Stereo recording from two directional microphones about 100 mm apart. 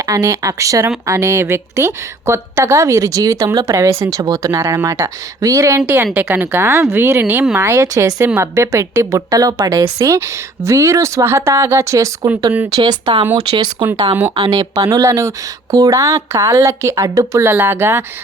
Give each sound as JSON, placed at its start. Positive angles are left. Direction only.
{"t": 0.0, "sound": "a woman's voice", "side_deg": -35}
{"t": 4.1, "sound": "speech", "side_deg": -40}
{"t": 6.1, "sound": "a woman's voice", "side_deg": -20}
{"t": 12.7, "sound": "speech", "side_deg": -45}